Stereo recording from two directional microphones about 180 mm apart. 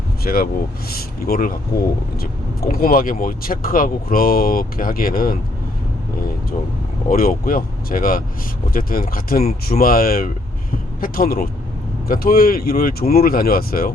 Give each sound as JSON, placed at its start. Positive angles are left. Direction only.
{"t": 0.3, "sound": "speech", "side_deg": 50}
{"t": 7.1, "sound": "speech", "side_deg": 50}